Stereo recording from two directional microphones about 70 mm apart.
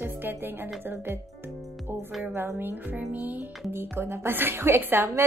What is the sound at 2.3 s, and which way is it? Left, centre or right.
Speech, right.